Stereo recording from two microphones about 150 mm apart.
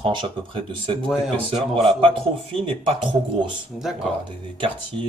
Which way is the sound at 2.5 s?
35° right (ahead or behind).